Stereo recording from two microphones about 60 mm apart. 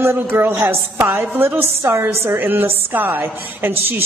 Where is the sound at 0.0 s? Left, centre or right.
Right.